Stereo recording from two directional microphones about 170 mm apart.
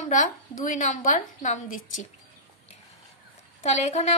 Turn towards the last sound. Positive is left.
turn(degrees=40)  # may be behind; listen again after turning